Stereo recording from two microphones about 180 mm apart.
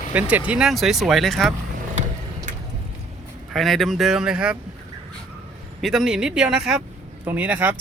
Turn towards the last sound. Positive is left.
turn(degrees=-10)  # may be behind; listen again after turning